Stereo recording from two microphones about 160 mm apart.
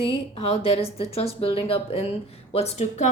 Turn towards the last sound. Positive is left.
turn(degrees=40)  # may be behind; listen again after turning